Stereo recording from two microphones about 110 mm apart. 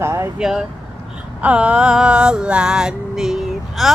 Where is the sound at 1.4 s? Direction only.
10° right (ahead or behind).